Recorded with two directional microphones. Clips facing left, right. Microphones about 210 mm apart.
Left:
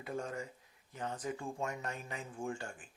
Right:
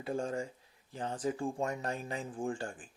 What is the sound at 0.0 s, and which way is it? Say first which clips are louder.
Speech: right 5 dB; 30° right (ahead or behind).